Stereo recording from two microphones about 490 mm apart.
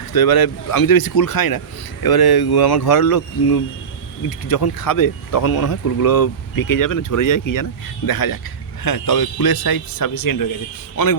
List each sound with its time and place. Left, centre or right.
0.1 s a man's voice: left